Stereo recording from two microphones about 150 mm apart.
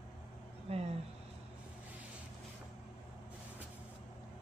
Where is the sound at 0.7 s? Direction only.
40° right (ahead or behind).